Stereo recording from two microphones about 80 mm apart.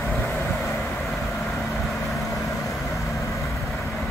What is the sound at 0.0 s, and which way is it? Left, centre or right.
Vehicle, centre.